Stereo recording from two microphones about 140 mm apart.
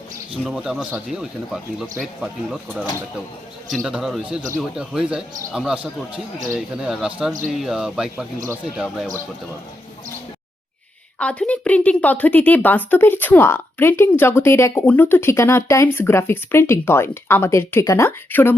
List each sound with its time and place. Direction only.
0.4 s speech: 5° right (ahead or behind)
11.2 s a woman's voice: 10° left (ahead or behind)